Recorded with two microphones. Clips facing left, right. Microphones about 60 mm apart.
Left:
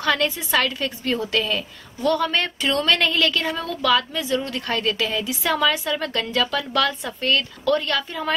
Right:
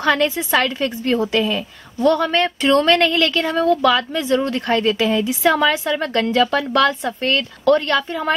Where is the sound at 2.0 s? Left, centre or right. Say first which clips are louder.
Right 5 dB; right.